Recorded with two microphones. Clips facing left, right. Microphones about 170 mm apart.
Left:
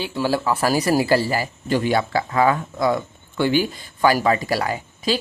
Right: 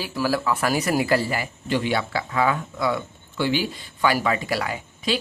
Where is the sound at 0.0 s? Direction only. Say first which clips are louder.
Left 2 dB; 25° left (ahead or behind).